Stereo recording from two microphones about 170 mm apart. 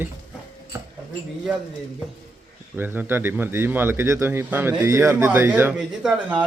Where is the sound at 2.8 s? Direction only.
10° right (ahead or behind).